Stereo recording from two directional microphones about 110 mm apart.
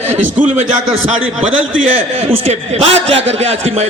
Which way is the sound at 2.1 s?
70° right (ahead or behind).